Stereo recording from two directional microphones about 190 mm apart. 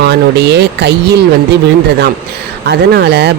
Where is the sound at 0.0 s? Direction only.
60° right (ahead or behind).